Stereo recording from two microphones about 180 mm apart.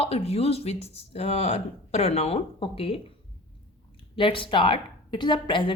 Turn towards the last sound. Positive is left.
turn(degrees=25)  # may be behind; listen again after turning